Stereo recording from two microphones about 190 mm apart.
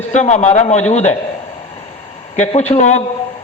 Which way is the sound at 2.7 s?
40° left (ahead or behind).